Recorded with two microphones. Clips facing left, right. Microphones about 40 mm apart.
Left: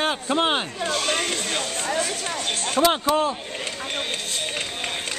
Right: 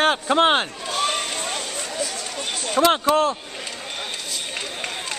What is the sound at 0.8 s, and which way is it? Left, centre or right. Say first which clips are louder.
Chatter: even; left.